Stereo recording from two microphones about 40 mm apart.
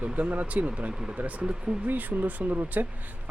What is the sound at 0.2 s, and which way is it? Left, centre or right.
Speech, right.